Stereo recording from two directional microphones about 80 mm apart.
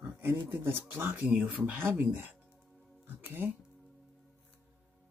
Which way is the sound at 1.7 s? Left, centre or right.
Right.